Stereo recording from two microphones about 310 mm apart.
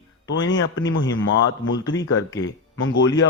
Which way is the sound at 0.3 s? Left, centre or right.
Left.